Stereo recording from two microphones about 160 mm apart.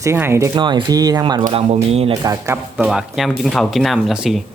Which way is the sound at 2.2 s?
20° right (ahead or behind).